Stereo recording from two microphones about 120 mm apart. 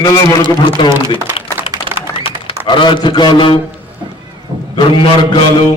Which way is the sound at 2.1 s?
45° left (ahead or behind).